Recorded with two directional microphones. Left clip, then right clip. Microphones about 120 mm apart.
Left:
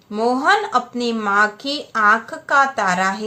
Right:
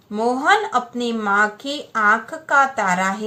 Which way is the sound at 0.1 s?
30° left (ahead or behind).